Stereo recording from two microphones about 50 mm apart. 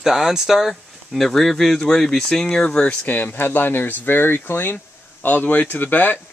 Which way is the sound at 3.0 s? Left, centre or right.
Left.